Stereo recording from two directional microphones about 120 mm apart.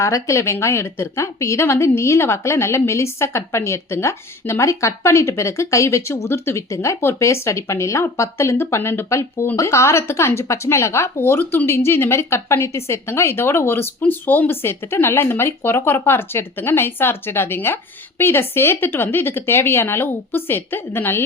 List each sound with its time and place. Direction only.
0.0 s speech: 25° left (ahead or behind)